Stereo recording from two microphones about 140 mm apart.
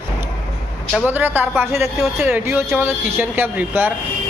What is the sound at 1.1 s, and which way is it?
Speech, 15° right (ahead or behind).